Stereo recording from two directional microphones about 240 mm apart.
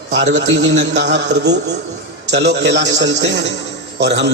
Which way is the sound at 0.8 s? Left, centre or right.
Right.